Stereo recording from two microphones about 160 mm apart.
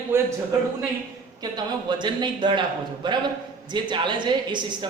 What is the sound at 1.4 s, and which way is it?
A man's voice, 25° right (ahead or behind).